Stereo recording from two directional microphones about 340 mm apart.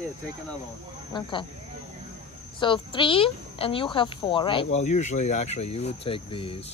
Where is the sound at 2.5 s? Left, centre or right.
Centre.